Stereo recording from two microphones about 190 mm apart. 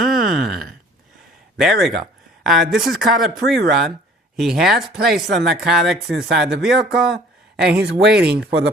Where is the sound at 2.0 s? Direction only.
Centre (ahead or behind).